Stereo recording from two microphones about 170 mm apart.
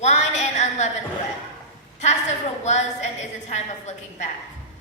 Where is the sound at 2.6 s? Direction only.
40° left (ahead or behind).